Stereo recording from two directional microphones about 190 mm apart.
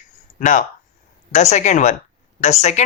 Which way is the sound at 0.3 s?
45° left (ahead or behind).